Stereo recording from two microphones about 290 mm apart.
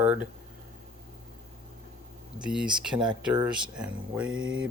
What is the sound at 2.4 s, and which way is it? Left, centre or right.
Speech, centre.